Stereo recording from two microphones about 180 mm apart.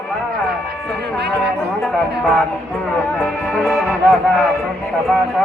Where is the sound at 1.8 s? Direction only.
Centre (ahead or behind).